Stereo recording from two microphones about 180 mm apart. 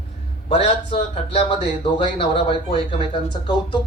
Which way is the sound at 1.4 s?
30° left (ahead or behind).